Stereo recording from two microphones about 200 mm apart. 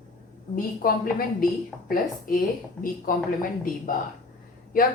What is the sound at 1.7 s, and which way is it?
Speech, 5° left (ahead or behind).